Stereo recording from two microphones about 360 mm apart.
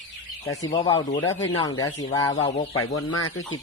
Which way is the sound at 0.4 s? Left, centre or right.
Centre.